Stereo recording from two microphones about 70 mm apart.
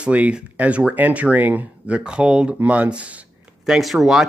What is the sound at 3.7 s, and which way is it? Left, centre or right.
Speech, centre.